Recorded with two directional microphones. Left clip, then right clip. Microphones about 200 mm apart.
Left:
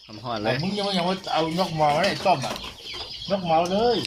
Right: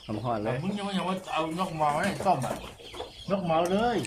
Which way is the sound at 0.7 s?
30° left (ahead or behind).